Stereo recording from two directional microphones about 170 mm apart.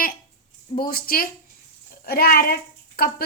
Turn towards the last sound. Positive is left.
turn(degrees=60)  # may be behind; listen again after turning